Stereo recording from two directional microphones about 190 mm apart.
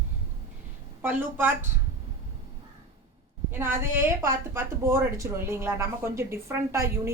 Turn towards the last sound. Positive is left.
turn(degrees=-15)  # may be behind; listen again after turning